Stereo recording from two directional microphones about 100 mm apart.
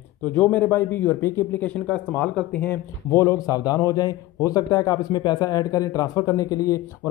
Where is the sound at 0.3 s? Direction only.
15° left (ahead or behind).